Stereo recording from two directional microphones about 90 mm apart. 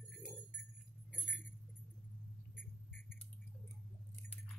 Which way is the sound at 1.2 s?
15° left (ahead or behind).